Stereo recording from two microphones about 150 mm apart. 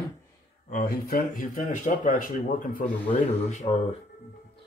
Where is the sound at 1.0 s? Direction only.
75° left (ahead or behind).